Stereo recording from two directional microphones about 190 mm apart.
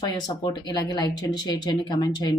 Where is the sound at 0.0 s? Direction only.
20° left (ahead or behind).